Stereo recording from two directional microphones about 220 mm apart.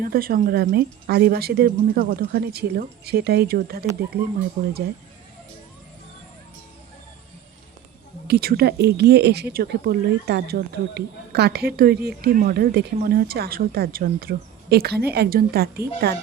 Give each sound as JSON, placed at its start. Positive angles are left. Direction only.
{"t": 0.0, "sound": "speech", "side_deg": -40}
{"t": 8.3, "sound": "speech", "side_deg": -45}